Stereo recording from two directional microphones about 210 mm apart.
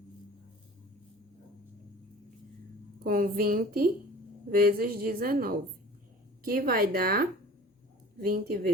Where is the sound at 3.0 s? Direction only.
45° right (ahead or behind).